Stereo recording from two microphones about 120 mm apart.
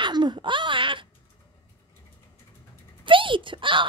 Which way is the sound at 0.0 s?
40° right (ahead or behind).